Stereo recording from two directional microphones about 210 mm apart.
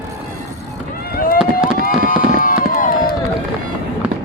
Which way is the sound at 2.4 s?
45° left (ahead or behind).